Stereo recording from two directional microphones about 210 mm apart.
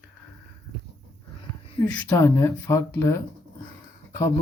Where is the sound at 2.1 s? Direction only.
10° left (ahead or behind).